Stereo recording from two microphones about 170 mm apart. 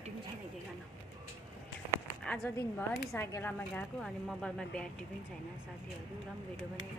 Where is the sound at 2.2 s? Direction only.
5° left (ahead or behind).